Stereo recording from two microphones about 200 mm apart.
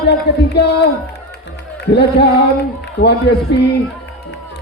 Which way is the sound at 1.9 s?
55° left (ahead or behind).